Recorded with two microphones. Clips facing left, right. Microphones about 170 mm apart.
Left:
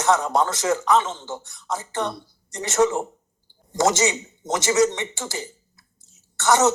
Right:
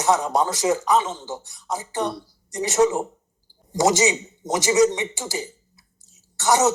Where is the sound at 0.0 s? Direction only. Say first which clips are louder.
Even; 15° right (ahead or behind).